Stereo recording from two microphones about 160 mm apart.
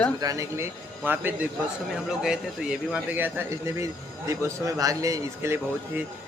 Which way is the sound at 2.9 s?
10° right (ahead or behind).